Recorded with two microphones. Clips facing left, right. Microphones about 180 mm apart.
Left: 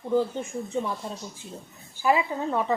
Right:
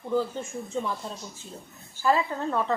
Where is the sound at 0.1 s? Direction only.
15° left (ahead or behind).